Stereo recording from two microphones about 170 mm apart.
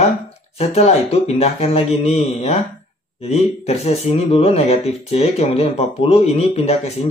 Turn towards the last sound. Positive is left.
turn(degrees=40)  # may be behind; listen again after turning